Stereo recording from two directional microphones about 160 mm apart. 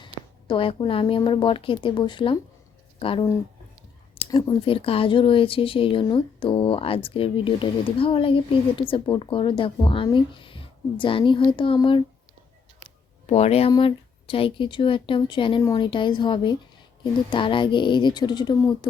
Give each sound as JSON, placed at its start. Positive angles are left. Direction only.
{"t": 0.0, "sound": "a woman's voice", "side_deg": 30}
{"t": 4.3, "sound": "speech", "side_deg": 30}